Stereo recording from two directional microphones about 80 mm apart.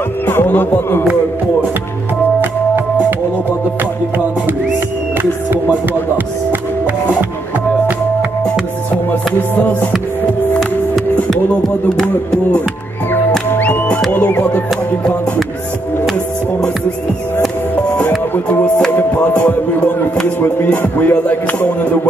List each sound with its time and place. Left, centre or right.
0.3 s music: left
9.3 s music: left
11.2 s music: centre; by 14.6 s left
18.9 s music: centre